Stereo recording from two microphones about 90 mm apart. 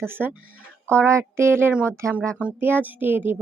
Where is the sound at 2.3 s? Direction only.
15° right (ahead or behind).